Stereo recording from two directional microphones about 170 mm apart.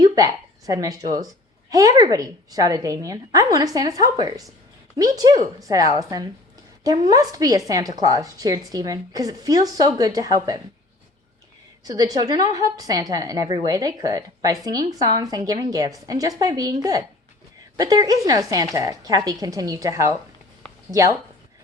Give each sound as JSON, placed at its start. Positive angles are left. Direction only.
{"t": 0.0, "sound": "a sound", "side_deg": -20}
{"t": 1.7, "sound": "a woman's voice", "side_deg": -20}
{"t": 11.9, "sound": "a woman's voice", "side_deg": -20}